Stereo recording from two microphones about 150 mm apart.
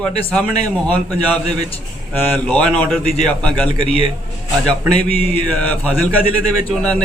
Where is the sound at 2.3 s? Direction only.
10° left (ahead or behind).